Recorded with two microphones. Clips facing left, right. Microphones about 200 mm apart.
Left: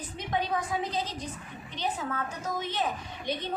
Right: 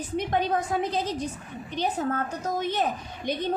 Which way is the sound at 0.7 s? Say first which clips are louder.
Right 5 dB; 50° right (ahead or behind).